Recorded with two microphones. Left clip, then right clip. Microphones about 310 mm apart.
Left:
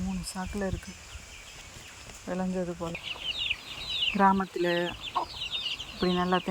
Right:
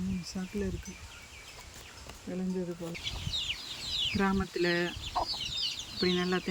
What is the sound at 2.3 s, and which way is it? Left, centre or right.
Speech, left.